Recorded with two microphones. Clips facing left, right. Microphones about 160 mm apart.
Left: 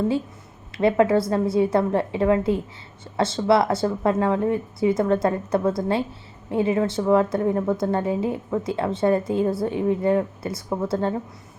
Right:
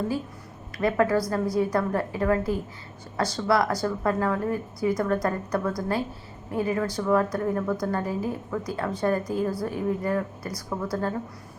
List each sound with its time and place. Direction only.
0.8 s a woman's voice: 25° left (ahead or behind)